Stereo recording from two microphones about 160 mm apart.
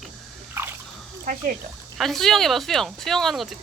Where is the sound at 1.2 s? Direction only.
55° right (ahead or behind).